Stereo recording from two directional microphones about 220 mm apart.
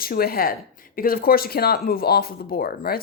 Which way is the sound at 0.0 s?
45° left (ahead or behind).